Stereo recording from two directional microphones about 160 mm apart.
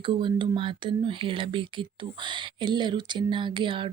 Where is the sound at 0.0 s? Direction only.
30° right (ahead or behind).